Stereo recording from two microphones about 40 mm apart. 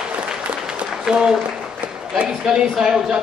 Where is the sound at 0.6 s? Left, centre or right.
Centre.